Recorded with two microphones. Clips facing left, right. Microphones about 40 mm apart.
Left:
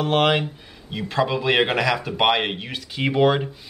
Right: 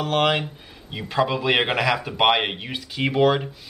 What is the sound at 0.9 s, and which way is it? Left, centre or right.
Speech, centre.